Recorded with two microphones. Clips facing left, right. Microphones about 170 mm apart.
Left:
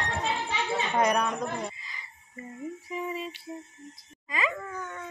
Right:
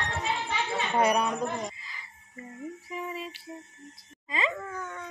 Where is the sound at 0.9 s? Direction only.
10° right (ahead or behind).